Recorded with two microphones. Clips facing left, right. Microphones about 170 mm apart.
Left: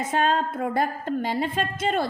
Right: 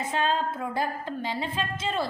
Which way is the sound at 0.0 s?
45° left (ahead or behind).